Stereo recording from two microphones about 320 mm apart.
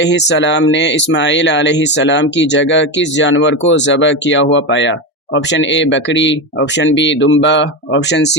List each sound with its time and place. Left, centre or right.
0.0 s a man's voice: left